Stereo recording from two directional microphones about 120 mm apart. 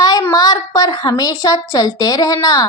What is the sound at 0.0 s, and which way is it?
A woman's voice, 30° left (ahead or behind).